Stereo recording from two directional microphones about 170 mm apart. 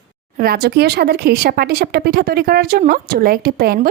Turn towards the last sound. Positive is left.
turn(degrees=-65)  # may be behind; listen again after turning